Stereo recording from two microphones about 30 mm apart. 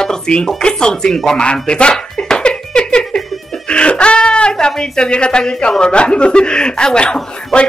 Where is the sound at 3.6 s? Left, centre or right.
Left.